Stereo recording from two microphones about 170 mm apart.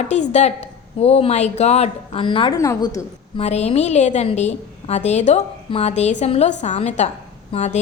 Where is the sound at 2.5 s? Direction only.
20° left (ahead or behind).